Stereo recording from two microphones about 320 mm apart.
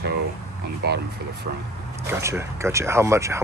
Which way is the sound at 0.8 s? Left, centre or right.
Right.